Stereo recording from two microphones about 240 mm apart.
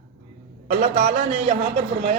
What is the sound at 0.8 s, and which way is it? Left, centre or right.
Speech, right.